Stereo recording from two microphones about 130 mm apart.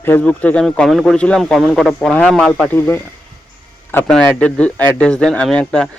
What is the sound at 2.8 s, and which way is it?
A man's voice, 20° left (ahead or behind).